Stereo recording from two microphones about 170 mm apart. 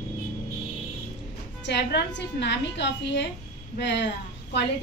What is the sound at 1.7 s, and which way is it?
A woman's voice, 80° left.